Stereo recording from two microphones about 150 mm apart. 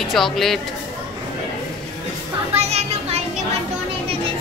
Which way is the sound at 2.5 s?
45° right (ahead or behind).